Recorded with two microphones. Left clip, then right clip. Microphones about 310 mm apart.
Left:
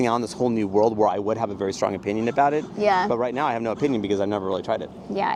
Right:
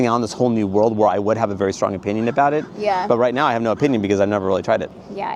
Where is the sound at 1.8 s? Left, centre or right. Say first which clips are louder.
Right 3 dB; right.